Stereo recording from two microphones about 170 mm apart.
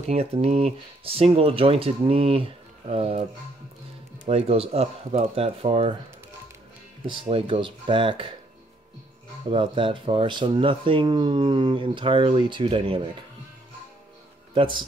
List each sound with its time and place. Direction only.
0.1 s speech: 35° right (ahead or behind)
4.3 s speech: 35° right (ahead or behind)
7.1 s speech: 30° right (ahead or behind)
9.5 s speech: 30° right (ahead or behind)
14.5 s speech: 30° right (ahead or behind)